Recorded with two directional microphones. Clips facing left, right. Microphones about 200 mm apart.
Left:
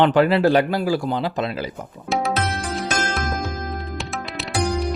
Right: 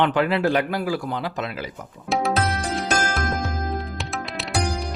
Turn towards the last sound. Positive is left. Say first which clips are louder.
# left 3 dB
turn(degrees=0)  # may be behind; listen again after turning